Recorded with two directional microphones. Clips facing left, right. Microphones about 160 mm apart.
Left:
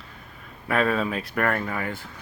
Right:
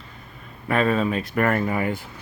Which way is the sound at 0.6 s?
Centre (ahead or behind).